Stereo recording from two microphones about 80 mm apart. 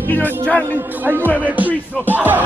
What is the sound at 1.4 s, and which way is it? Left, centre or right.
Music, right.